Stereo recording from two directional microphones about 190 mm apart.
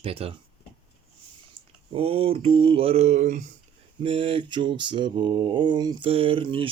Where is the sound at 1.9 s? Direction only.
30° right (ahead or behind).